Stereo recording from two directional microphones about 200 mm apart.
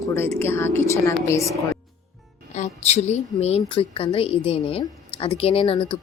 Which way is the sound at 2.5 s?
35° left (ahead or behind).